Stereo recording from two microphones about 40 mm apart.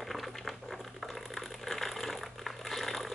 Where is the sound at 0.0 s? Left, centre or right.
Centre.